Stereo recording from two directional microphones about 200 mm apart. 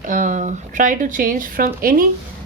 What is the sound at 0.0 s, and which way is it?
A woman's voice, 40° right (ahead or behind).